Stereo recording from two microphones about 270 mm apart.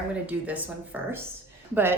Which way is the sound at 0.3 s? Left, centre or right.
Centre.